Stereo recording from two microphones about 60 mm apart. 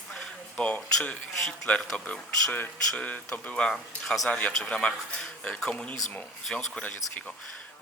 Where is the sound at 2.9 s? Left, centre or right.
Centre.